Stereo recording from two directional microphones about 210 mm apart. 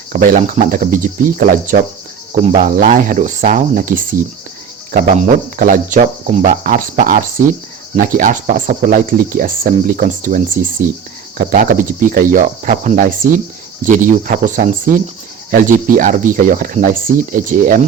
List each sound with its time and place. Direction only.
0.1 s speech: 40° right (ahead or behind)